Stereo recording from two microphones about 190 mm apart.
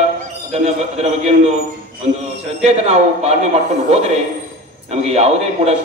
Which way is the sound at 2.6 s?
35° right (ahead or behind).